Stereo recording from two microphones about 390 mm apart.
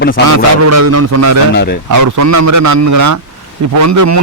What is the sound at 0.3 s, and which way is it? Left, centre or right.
A man's voice, right.